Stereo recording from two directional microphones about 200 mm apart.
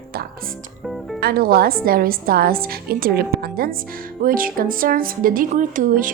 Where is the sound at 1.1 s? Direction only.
50° right (ahead or behind).